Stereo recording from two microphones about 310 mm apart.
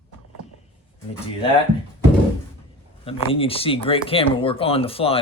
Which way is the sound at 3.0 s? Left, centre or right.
Centre.